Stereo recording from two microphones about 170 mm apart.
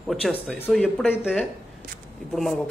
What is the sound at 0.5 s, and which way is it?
Speech, 10° left (ahead or behind).